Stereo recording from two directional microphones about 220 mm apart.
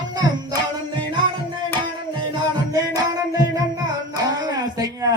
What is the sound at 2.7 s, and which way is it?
Music, 15° right (ahead or behind).